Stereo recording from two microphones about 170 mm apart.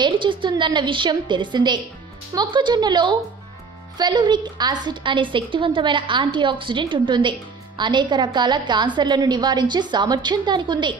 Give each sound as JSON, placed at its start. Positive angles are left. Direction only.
{"t": 0.0, "sound": "a woman's voice", "side_deg": -30}